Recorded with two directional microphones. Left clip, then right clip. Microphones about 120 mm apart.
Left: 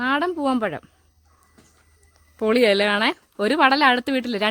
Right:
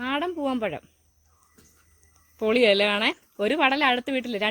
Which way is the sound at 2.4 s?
20° left (ahead or behind).